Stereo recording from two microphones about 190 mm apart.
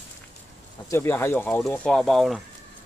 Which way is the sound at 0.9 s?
10° left (ahead or behind).